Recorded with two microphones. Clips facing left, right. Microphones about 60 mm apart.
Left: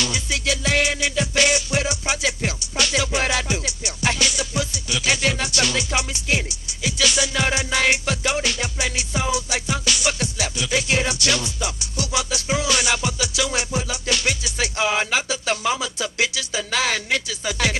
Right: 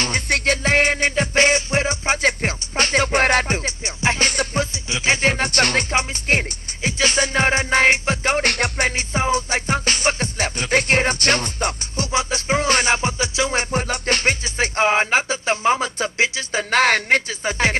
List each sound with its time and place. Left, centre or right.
0.0 s music: right
4.8 s music: right